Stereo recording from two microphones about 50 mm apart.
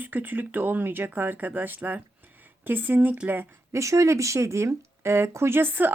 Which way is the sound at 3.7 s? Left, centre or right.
Right.